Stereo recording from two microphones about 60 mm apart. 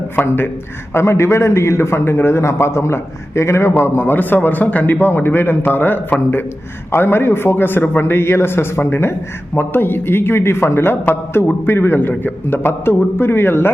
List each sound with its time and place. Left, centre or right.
0.3 s a man's voice: left